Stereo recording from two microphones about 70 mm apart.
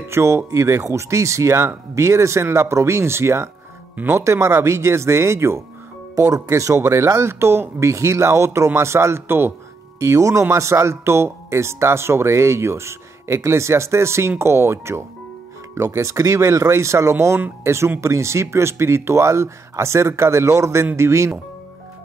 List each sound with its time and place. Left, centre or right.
0.1 s speech: right
3.9 s speech: right
4.2 s speech: right
6.1 s speech: right
9.9 s speech: right